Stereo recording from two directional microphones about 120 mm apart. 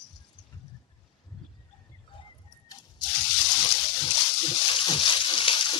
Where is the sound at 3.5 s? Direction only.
40° left (ahead or behind).